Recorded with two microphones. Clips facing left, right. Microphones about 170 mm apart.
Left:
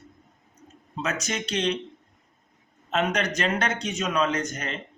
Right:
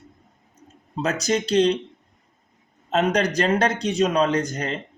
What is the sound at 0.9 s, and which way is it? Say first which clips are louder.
Speech: right 7 dB; 35° right (ahead or behind).